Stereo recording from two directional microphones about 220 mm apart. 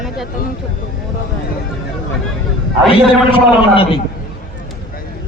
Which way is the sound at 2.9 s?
25° left (ahead or behind).